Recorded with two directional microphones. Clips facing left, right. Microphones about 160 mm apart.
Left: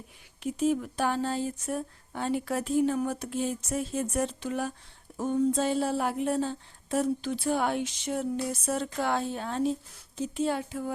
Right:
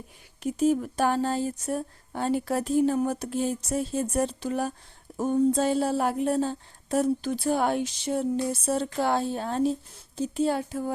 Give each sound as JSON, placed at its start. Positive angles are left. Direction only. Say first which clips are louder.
{"t": 0.4, "sound": "speech", "louder": "right 3 dB", "side_deg": -40}